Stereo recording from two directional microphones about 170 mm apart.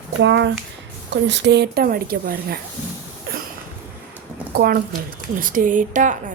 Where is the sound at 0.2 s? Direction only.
90° right; by 2.6 s 60° right (ahead or behind).